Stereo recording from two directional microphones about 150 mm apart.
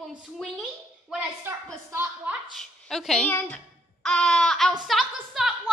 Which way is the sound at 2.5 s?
Centre (ahead or behind).